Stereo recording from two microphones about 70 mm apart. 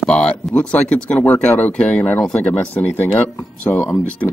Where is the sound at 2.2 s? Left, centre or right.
Centre.